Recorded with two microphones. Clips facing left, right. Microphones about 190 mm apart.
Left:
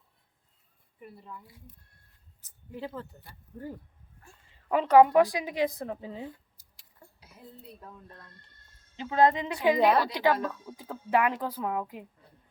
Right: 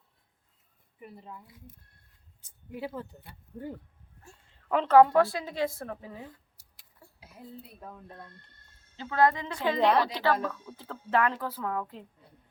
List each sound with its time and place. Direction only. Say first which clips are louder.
2.7 s speech: right 1 dB; 10° right (ahead or behind)
4.7 s speech: even; 10° left (ahead or behind)
9.0 s speech: left 2 dB; 20° left (ahead or behind)